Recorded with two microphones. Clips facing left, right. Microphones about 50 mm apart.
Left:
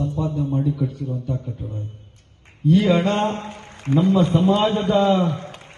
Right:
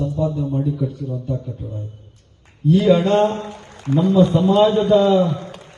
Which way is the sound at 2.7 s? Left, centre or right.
Left.